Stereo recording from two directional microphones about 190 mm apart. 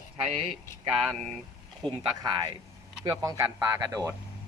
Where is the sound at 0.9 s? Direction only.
Centre (ahead or behind).